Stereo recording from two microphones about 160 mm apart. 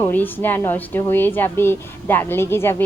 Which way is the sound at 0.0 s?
10° left (ahead or behind).